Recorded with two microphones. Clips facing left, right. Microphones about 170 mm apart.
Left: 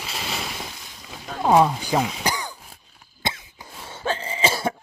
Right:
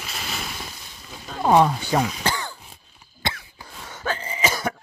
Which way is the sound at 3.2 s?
20° left (ahead or behind).